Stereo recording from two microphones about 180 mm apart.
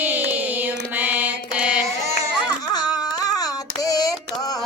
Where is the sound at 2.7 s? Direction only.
20° left (ahead or behind).